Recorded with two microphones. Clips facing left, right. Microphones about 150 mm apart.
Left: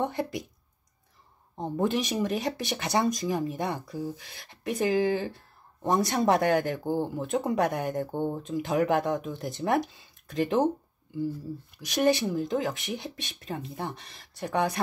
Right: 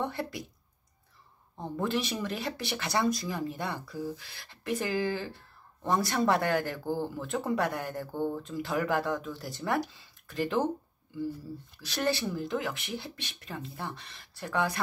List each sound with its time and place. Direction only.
0.0 s speech: 20° left (ahead or behind)
1.6 s speech: 20° left (ahead or behind)
11.7 s speech: 15° left (ahead or behind)